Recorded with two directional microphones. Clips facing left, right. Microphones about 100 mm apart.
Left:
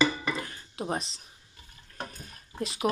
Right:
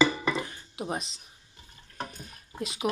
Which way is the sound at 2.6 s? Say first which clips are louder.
Left 1 dB; 5° right (ahead or behind).